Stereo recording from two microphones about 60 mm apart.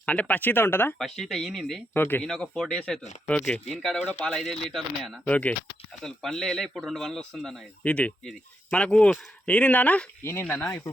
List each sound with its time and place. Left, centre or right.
0.0 s speech: left
0.9 s speech: centre
1.9 s speech: left
2.2 s speech: centre
4.0 s speech: left
4.4 s speech: centre
5.2 s speech: left
6.0 s speech: centre
7.9 s speech: left